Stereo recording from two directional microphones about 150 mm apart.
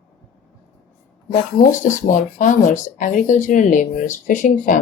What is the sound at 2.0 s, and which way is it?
Speech, 60° left (ahead or behind).